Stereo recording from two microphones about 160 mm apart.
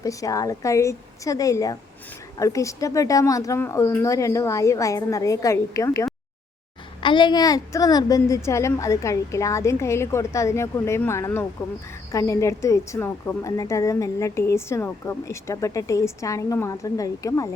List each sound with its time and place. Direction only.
0.0 s a woman's voice: 20° left (ahead or behind)
7.0 s a woman's voice: 30° left (ahead or behind)